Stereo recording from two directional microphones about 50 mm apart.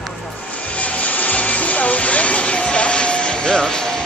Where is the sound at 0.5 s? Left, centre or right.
Left.